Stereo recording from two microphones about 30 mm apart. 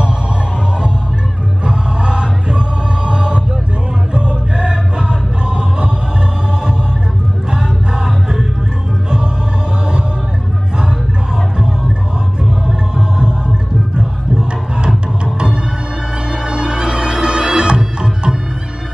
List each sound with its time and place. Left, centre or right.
1.6 s music: right
7.5 s music: right
12.4 s music: right